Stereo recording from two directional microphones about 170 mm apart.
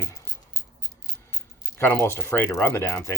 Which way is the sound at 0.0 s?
20° left (ahead or behind).